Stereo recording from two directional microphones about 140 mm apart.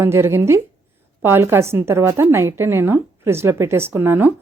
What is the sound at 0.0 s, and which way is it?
A woman's voice, 20° right (ahead or behind).